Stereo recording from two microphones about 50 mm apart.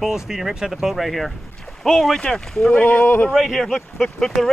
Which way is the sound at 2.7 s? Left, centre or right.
Left.